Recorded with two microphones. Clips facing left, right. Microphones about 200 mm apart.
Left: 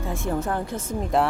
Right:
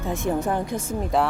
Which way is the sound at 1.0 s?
Centre (ahead or behind).